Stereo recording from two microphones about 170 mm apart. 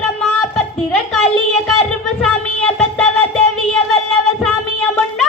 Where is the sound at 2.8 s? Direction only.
5° left (ahead or behind).